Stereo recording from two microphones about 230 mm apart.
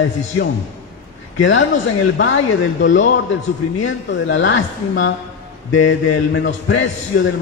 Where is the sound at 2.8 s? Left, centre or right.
Left.